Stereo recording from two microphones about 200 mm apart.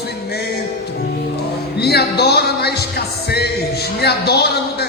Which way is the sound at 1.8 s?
55° left (ahead or behind).